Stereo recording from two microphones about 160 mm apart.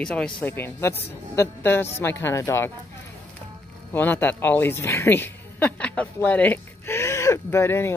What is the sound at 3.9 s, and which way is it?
A woman's voice, 10° left (ahead or behind).